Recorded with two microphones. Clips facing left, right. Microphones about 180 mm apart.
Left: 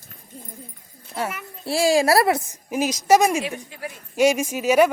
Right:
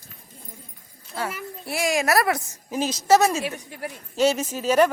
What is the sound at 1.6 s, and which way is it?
Speech, 30° left (ahead or behind).